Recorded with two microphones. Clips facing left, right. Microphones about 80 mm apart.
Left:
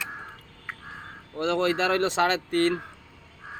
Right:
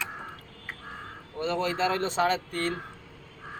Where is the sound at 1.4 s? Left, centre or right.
Left.